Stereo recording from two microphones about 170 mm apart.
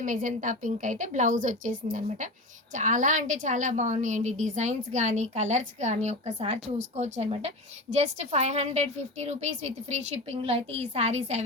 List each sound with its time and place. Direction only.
0.0 s a woman's voice: 50° right (ahead or behind)